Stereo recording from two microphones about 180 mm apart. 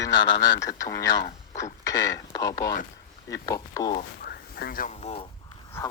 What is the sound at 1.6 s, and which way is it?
Speech, 20° left (ahead or behind).